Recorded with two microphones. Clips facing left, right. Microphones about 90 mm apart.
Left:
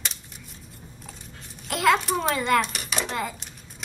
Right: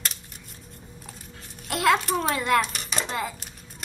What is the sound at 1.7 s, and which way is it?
A child's voice, centre (ahead or behind).